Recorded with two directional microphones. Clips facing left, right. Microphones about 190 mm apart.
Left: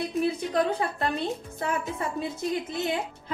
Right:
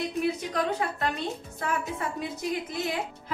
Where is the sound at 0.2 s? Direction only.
Centre (ahead or behind).